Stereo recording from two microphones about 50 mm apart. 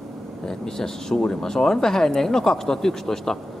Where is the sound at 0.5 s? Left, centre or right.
Centre.